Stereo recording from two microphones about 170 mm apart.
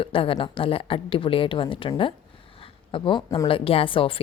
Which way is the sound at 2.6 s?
30° left (ahead or behind).